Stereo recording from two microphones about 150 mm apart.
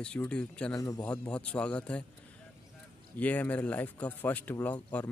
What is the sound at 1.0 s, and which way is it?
Speech, 10° left (ahead or behind).